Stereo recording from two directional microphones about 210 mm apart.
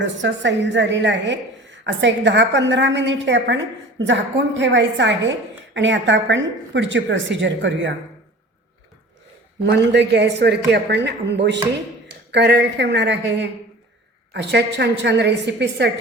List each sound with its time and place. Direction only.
0.0 s a woman's voice: 60° right (ahead or behind)
9.6 s a man's voice: 55° right (ahead or behind)